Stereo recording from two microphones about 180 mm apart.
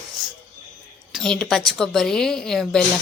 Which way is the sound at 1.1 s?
5° left (ahead or behind).